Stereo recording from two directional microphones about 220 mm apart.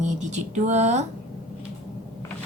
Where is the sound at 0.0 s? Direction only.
30° right (ahead or behind).